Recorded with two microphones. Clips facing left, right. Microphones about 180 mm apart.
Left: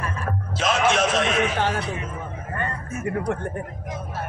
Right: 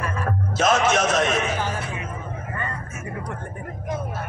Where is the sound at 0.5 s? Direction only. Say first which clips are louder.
Right 2 dB; 45° right (ahead or behind).